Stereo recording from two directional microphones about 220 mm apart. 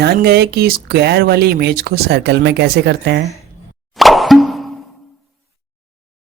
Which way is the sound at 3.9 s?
Centre (ahead or behind).